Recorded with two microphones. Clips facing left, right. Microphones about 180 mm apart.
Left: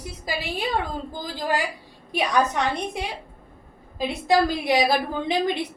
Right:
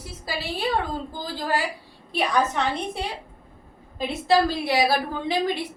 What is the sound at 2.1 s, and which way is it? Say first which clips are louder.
A woman's voice: left 1 dB; 15° left (ahead or behind).